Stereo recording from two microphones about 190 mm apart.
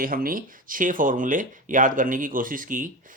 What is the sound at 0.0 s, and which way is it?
Speech, 50° right (ahead or behind).